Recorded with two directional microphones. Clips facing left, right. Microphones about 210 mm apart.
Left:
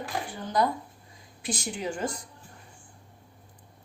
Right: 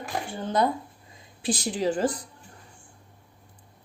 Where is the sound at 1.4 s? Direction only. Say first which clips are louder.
Right 6 dB; 30° right (ahead or behind).